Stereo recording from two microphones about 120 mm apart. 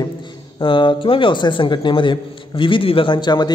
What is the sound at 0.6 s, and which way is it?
A man's voice, 45° left (ahead or behind).